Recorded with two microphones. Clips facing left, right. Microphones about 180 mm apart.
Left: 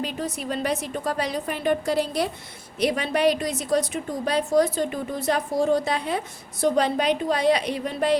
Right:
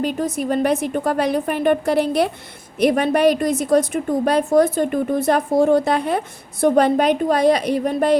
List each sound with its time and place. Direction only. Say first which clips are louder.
0.0 s a woman's voice: right 8 dB; 50° right (ahead or behind)